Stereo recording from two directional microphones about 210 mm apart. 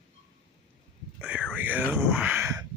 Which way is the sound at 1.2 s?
5° right (ahead or behind).